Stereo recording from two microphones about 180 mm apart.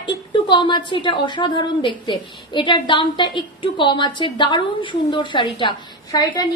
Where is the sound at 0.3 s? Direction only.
25° left (ahead or behind).